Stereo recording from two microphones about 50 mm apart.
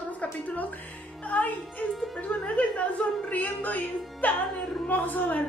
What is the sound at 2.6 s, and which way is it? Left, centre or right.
A woman's voice, left.